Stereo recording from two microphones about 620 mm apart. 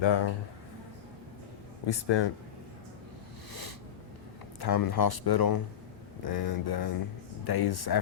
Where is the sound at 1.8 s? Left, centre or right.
Left.